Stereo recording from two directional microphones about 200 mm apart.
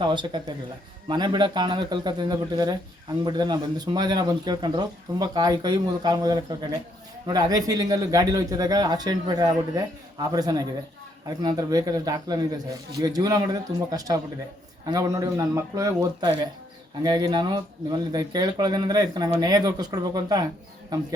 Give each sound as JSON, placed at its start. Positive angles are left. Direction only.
{"t": 0.0, "sound": "a man's voice", "side_deg": -20}